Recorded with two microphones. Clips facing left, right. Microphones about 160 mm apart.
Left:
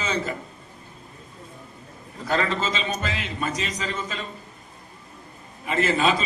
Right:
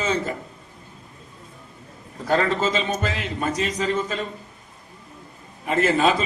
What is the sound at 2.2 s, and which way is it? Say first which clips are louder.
A man's voice: right 4 dB; 50° right (ahead or behind).